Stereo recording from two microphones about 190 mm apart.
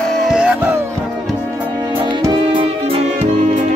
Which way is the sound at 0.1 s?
Centre (ahead or behind).